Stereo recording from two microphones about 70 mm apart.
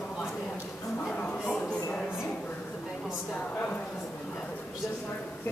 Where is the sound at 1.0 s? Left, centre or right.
Centre.